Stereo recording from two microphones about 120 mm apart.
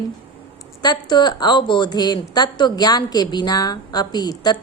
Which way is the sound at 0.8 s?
35° left (ahead or behind).